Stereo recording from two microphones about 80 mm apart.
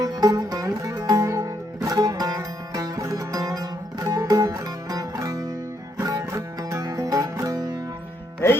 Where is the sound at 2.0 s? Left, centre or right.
Right.